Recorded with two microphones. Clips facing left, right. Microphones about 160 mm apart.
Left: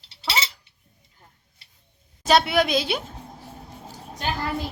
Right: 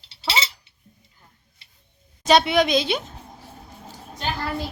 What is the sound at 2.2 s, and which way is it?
Speech, 5° left (ahead or behind).